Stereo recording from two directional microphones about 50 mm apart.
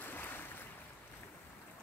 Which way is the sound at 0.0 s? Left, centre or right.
Left.